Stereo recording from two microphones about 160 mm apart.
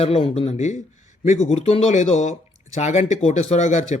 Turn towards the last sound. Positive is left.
turn(degrees=45)  # may be behind; listen again after turning